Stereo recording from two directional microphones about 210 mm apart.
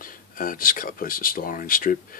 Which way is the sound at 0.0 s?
40° left (ahead or behind).